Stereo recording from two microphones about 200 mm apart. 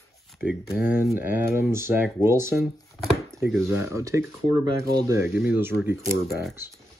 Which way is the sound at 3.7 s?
15° right (ahead or behind).